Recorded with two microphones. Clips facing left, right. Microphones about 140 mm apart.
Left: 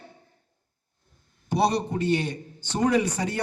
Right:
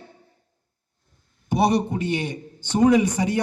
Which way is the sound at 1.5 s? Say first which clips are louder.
Right 3 dB; 15° right (ahead or behind).